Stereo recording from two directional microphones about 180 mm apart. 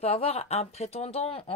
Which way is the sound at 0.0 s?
35° left (ahead or behind).